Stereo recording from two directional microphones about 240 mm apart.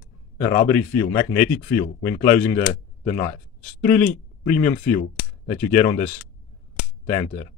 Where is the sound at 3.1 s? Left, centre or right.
Left.